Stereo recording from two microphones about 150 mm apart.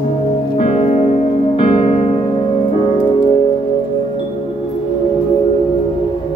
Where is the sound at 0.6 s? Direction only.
45° left (ahead or behind).